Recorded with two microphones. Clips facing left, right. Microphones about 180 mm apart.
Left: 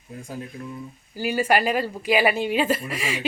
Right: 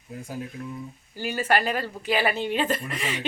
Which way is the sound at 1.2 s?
10° left (ahead or behind).